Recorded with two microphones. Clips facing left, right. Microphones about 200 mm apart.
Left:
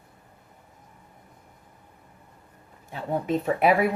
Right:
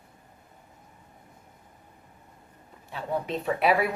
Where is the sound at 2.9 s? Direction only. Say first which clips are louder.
Left 4 dB; 45° left (ahead or behind).